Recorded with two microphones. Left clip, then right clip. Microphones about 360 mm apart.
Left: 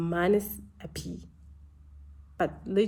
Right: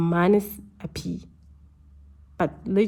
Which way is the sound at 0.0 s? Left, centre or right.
Right.